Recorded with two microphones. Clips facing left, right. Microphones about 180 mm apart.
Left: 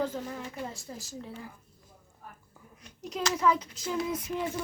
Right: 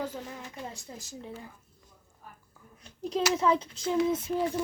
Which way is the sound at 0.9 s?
20° right (ahead or behind).